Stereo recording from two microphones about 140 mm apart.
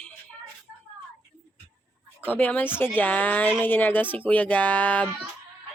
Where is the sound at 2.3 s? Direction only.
10° left (ahead or behind).